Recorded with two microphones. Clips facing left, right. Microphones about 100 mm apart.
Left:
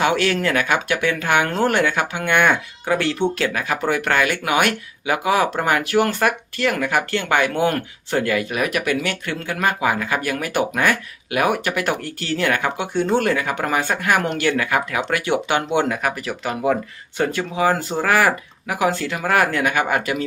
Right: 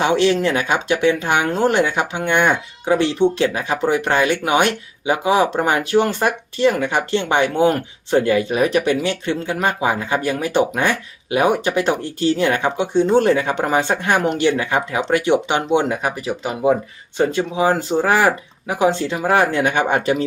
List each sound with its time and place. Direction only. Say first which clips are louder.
0.0 s speech: right 3 dB; 20° right (ahead or behind)